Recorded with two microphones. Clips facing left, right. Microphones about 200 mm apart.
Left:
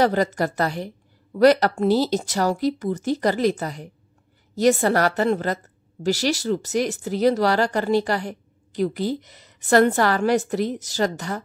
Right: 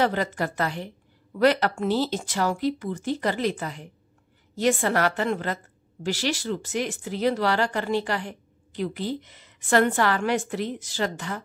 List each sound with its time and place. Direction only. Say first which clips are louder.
0.0 s a woman's voice: left 5 dB; 40° left (ahead or behind)